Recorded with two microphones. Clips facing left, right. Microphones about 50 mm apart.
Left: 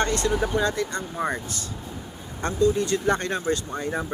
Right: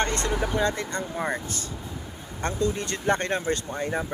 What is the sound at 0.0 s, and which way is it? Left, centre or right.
Speech, right.